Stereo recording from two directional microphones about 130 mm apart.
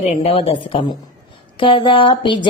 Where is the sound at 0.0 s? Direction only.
50° left (ahead or behind).